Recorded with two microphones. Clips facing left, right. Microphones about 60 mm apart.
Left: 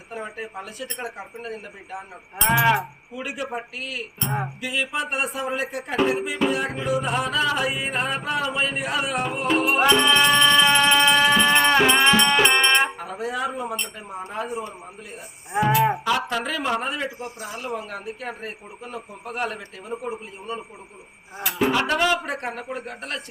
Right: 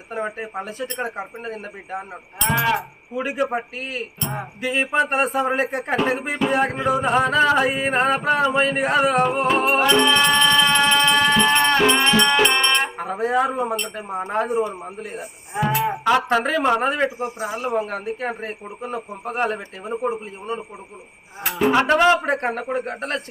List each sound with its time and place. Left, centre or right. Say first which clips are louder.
0.1 s speech: right 5 dB; right
2.4 s livestock: left 1 dB; centre
3.2 s speech: right 7 dB; right
9.9 s music: even; centre
13.0 s speech: right 7 dB; right
16.0 s speech: right 6 dB; right
21.7 s speech: right 7 dB; right